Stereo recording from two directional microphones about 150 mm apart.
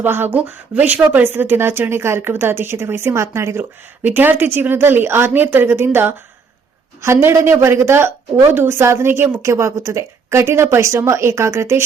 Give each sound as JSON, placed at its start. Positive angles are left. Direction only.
{"t": 0.0, "sound": "a woman's voice", "side_deg": -15}